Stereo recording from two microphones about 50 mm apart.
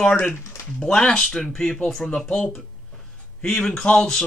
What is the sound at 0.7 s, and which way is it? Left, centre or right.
Speech, centre.